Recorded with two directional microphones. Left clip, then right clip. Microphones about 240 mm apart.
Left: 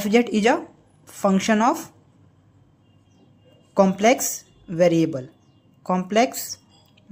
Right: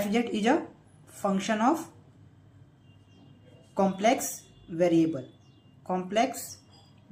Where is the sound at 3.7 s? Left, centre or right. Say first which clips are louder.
Left 7 dB; left.